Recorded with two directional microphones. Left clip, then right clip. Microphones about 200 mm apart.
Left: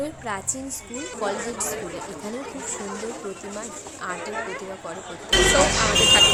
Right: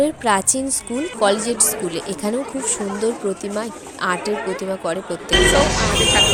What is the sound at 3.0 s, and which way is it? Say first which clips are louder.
A woman's voice: right 11 dB; 35° right (ahead or behind).